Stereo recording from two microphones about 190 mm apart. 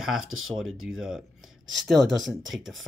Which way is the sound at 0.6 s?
Centre (ahead or behind).